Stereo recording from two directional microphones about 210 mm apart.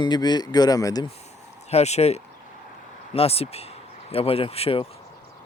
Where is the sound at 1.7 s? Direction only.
30° left (ahead or behind).